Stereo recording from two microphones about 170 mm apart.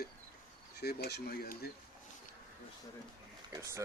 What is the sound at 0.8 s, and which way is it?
Speech, 70° left (ahead or behind).